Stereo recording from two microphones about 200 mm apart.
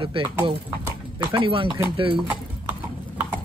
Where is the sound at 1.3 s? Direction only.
25° right (ahead or behind).